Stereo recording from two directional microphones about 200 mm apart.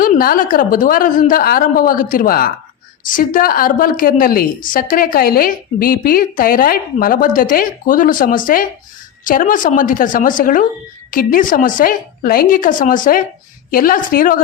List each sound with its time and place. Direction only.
0.0 s a woman's voice: 45° left (ahead or behind)